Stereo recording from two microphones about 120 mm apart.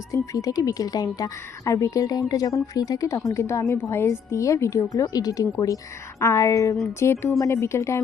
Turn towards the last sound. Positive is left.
turn(degrees=25)  # may be behind; listen again after turning